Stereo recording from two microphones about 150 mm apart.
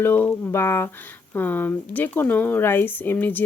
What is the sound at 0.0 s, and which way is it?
Speech, 15° left (ahead or behind).